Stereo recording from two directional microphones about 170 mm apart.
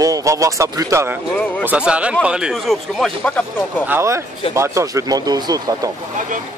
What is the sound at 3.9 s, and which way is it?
Speech, 15° right (ahead or behind).